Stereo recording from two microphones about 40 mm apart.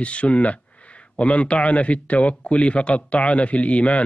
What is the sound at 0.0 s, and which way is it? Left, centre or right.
Speech, left.